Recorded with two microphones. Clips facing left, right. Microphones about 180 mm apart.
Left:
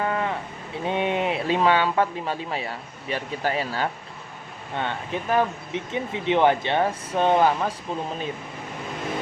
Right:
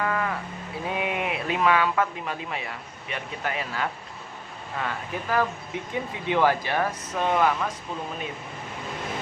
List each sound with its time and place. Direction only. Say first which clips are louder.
0.0 s sheep: left 2 dB; 25° left (ahead or behind)
0.9 s speech: left 5 dB; 30° left (ahead or behind)